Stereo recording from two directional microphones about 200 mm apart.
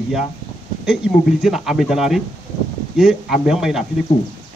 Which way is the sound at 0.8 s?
Centre (ahead or behind).